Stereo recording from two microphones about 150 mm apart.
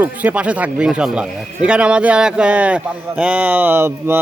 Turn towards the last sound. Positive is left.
turn(degrees=-15)  # may be behind; listen again after turning